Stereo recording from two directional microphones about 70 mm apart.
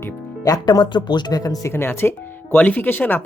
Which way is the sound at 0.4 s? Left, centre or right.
Left.